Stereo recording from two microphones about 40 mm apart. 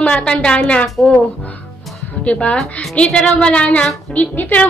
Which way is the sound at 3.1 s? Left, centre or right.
Left.